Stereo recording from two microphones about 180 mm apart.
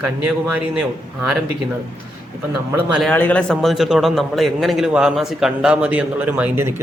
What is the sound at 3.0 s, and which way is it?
A man's voice, 10° left (ahead or behind).